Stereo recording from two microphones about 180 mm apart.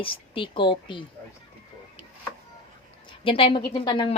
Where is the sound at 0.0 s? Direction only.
30° left (ahead or behind).